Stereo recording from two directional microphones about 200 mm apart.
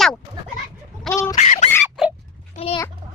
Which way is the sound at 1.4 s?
40° left (ahead or behind).